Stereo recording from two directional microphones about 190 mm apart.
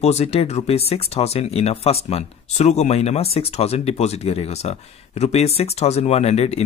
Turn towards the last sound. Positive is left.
turn(degrees=35)  # may be behind; listen again after turning